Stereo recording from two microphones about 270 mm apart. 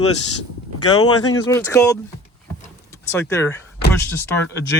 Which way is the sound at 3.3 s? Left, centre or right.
Centre.